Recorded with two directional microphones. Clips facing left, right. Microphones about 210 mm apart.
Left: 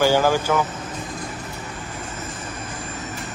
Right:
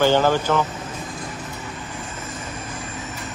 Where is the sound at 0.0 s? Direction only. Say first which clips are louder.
Even; 10° left (ahead or behind).